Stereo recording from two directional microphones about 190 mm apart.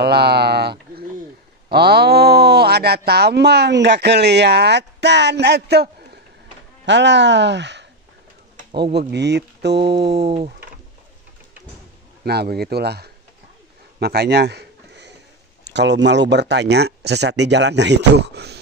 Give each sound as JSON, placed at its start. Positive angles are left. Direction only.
{"t": 0.0, "sound": "bird", "side_deg": -60}
{"t": 1.7, "sound": "speech", "side_deg": -55}
{"t": 6.9, "sound": "speech", "side_deg": -65}
{"t": 9.1, "sound": "speech", "side_deg": -60}
{"t": 12.3, "sound": "speech", "side_deg": -55}
{"t": 13.9, "sound": "a sound", "side_deg": -60}
{"t": 15.6, "sound": "speech", "side_deg": -65}